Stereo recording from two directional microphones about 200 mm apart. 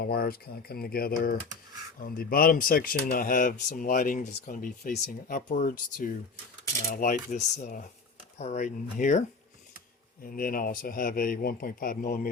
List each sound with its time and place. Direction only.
0.0 s speech: 50° left (ahead or behind)
10.2 s speech: 45° left (ahead or behind)